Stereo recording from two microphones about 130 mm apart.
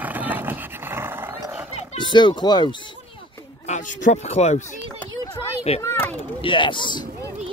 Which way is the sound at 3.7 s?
75° left (ahead or behind).